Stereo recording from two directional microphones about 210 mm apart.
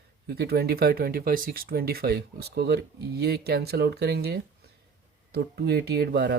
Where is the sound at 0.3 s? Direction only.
50° right (ahead or behind).